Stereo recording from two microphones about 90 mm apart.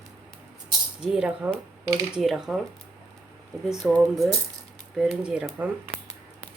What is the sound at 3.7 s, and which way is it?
Speech, centre (ahead or behind).